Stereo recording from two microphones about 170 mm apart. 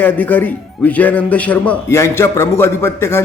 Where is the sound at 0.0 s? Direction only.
10° left (ahead or behind).